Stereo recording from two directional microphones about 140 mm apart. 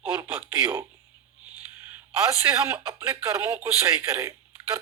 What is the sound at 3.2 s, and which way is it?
Speech, 20° right (ahead or behind).